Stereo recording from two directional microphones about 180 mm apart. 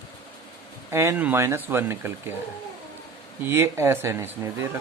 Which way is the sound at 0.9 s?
15° right (ahead or behind).